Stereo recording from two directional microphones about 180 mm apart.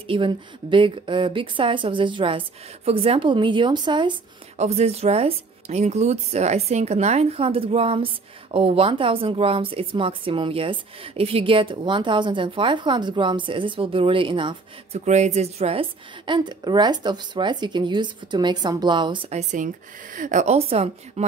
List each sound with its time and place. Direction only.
0.0 s a woman's voice: 30° right (ahead or behind)
4.6 s a woman's voice: 35° right (ahead or behind)
15.0 s a woman's voice: 40° right (ahead or behind)